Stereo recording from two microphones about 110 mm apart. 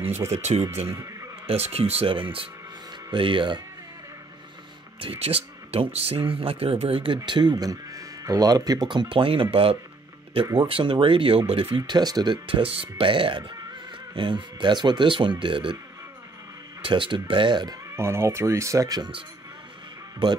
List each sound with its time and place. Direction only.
0.3 s speech: 90° right
0.8 s a sound: 25° right (ahead or behind)
1.5 s speech: 65° right (ahead or behind); by 3.6 s 45° right (ahead or behind)
5.2 s speech: 65° right (ahead or behind)
7.2 s speech: 45° right (ahead or behind)
16.8 s speech: 50° right (ahead or behind)
17.9 s speech: 25° right (ahead or behind); by 19.2 s 40° right (ahead or behind)